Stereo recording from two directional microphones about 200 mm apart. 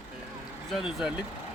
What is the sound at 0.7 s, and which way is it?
Speech, centre (ahead or behind).